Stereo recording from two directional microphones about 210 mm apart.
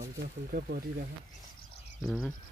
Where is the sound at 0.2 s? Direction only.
45° right (ahead or behind).